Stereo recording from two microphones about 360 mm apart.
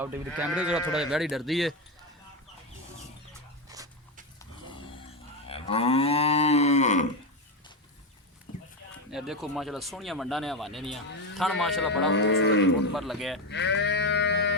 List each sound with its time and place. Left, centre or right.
0.0 s speech: centre
5.5 s moo: centre
9.0 s speech: centre
12.0 s cattle: left
12.9 s speech: centre
13.5 s sheep: left